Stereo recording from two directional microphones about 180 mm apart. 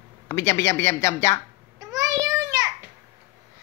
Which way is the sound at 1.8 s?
20° right (ahead or behind).